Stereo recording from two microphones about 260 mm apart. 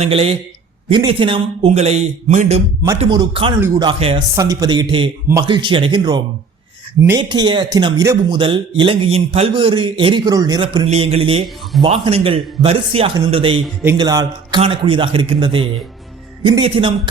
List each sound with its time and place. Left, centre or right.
0.0 s a man's voice: right